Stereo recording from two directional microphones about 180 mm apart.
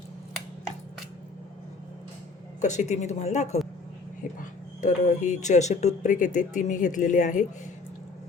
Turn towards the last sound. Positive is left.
turn(degrees=45)  # may be behind; listen again after turning